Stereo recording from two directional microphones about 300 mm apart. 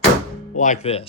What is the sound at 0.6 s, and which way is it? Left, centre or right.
Speech, left.